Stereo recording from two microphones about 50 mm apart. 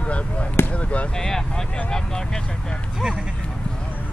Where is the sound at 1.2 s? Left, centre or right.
Centre.